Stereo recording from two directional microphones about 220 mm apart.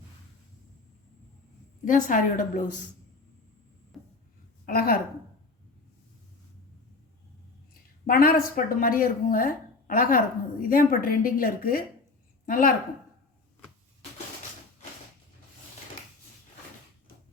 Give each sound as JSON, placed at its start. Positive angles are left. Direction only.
{"t": 1.8, "sound": "a woman's voice", "side_deg": 35}
{"t": 3.9, "sound": "writing", "side_deg": 0}
{"t": 4.6, "sound": "a woman's voice", "side_deg": 40}
{"t": 7.7, "sound": "a woman's voice", "side_deg": 40}